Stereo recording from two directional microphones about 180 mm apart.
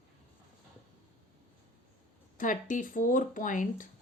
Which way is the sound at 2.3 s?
45° left (ahead or behind).